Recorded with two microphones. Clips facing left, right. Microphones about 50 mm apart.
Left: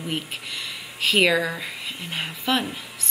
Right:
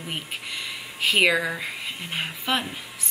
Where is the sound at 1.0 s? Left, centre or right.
Centre.